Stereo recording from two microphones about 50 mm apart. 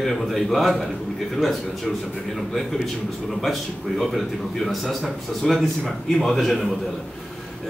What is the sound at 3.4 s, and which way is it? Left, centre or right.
A man's voice, centre.